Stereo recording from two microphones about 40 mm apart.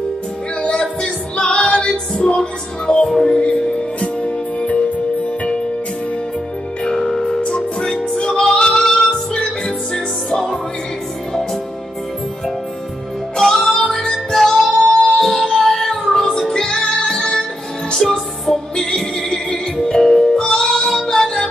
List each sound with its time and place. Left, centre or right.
0.6 s female singing: left
2.1 s music: centre
7.0 s music: centre
7.9 s music: centre
8.4 s female singing: centre
8.8 s music: centre
13.4 s music: centre